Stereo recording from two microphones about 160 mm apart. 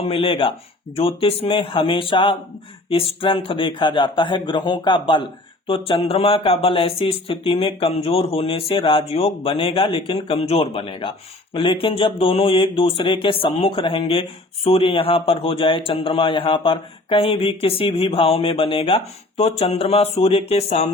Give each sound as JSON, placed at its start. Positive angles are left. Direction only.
{"t": 0.0, "sound": "speech", "side_deg": 35}